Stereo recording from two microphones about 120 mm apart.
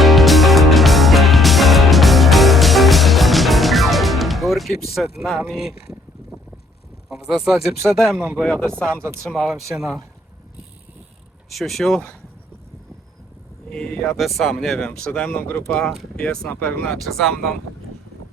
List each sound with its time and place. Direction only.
0.0 s music: centre (ahead or behind)
5.5 s speech: 5° right (ahead or behind)
7.1 s speech: 5° right (ahead or behind)
8.6 s speech: 20° right (ahead or behind)
9.2 s speech: centre (ahead or behind)
11.4 s speech: centre (ahead or behind)
13.7 s speech: 5° left (ahead or behind)
15.8 s speech: 5° left (ahead or behind)